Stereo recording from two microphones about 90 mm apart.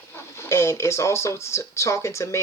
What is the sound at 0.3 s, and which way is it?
Speech, 30° left (ahead or behind).